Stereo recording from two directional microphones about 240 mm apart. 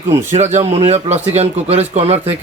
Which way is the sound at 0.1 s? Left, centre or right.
Right.